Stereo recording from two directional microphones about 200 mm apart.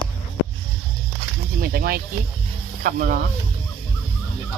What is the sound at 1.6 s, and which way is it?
Snake, 50° right (ahead or behind).